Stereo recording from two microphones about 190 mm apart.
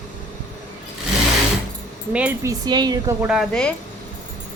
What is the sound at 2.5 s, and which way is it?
Speech, 20° right (ahead or behind).